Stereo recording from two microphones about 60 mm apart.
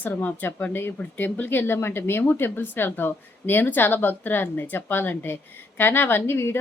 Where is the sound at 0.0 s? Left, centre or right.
Left.